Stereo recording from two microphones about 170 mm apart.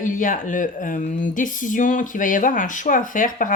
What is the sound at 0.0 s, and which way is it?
Speech, 50° left (ahead or behind).